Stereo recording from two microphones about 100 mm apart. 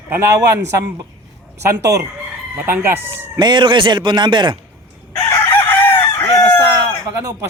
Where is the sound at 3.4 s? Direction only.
50° right (ahead or behind).